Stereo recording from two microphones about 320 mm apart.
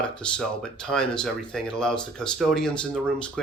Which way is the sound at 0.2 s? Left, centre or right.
Centre.